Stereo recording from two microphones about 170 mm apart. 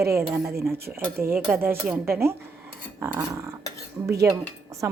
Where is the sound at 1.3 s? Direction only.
5° right (ahead or behind).